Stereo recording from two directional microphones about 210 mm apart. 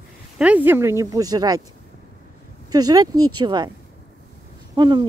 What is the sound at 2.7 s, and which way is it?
Speech, 20° right (ahead or behind).